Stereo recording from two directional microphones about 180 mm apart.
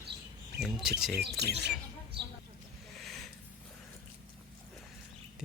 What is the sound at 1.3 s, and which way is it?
Speech, 65° right (ahead or behind).